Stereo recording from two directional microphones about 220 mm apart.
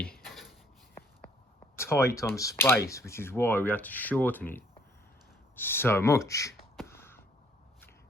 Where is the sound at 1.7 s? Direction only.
10° left (ahead or behind).